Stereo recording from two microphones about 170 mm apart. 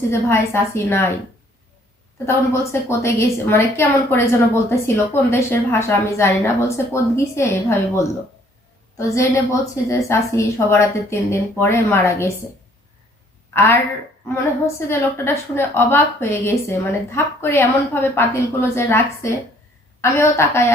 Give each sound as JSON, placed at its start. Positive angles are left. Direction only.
{"t": 0.1, "sound": "a woman's voice", "side_deg": 15}
{"t": 2.1, "sound": "a woman's voice", "side_deg": 15}
{"t": 9.0, "sound": "a woman's voice", "side_deg": 15}
{"t": 13.5, "sound": "a woman's voice", "side_deg": 15}